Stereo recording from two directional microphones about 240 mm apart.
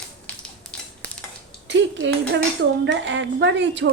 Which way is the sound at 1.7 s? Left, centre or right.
Right.